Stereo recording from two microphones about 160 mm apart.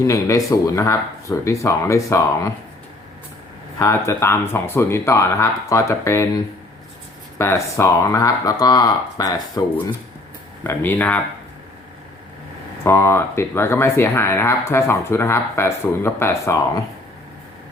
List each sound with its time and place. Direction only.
0.0 s speech: 20° left (ahead or behind)
3.8 s speech: 15° left (ahead or behind)
12.8 s speech: 15° left (ahead or behind)